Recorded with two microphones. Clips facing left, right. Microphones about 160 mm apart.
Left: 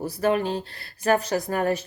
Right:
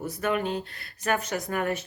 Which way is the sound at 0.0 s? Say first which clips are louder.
Left 4 dB; 35° left (ahead or behind).